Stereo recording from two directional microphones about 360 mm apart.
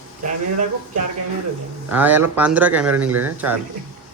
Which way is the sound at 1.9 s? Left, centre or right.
Centre.